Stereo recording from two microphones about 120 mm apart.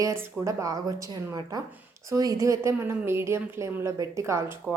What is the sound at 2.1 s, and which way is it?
A woman's voice, 30° right (ahead or behind).